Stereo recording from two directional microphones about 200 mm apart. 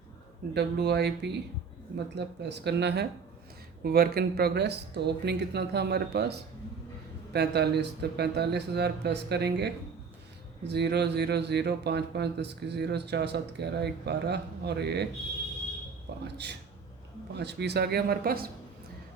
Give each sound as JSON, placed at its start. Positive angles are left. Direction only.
{"t": 0.5, "sound": "speech", "side_deg": -55}
{"t": 7.3, "sound": "speech", "side_deg": -55}
{"t": 16.2, "sound": "speech", "side_deg": -55}